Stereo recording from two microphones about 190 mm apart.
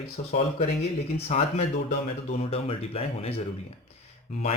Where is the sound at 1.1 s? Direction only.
35° left (ahead or behind).